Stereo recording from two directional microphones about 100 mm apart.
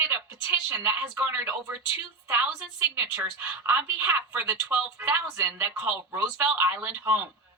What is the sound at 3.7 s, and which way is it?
Speech, 20° right (ahead or behind).